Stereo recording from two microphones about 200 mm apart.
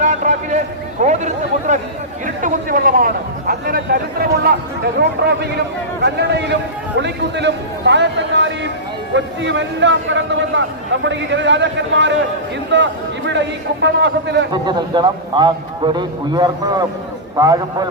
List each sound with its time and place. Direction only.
0.0 s a sound: 35° right (ahead or behind)
1.0 s a man's voice: 35° right (ahead or behind); by 14.4 s 60° right (ahead or behind)
14.5 s a man's voice: 20° right (ahead or behind)